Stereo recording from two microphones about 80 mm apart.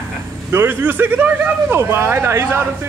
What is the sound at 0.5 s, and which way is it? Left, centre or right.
Speech, right.